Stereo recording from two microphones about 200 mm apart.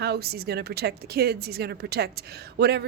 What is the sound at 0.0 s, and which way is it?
A woman's voice, 55° right (ahead or behind).